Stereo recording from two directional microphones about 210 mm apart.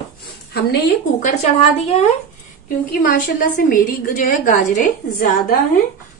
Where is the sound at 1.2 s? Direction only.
30° left (ahead or behind).